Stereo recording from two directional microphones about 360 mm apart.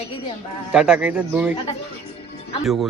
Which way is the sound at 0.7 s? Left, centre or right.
Centre.